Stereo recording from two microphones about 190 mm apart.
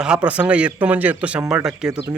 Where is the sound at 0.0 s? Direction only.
5° right (ahead or behind).